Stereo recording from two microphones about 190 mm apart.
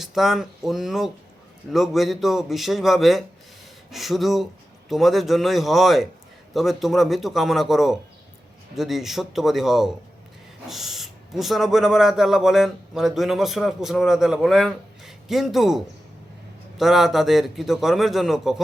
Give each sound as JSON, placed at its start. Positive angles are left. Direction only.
{"t": 0.0, "sound": "speech", "side_deg": 0}